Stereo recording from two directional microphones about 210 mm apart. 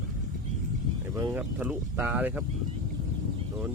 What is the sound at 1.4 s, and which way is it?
Speech, 5° right (ahead or behind).